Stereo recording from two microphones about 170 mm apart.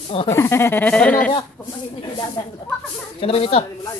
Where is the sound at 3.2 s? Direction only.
35° left (ahead or behind).